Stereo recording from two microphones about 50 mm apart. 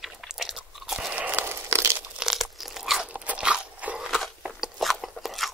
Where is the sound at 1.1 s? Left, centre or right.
Right.